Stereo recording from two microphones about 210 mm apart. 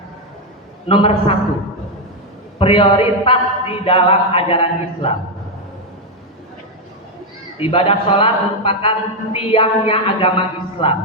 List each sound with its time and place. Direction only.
0.9 s a man's voice: 25° left (ahead or behind)
2.6 s a man's voice: 25° left (ahead or behind)
7.6 s a man's voice: 25° left (ahead or behind)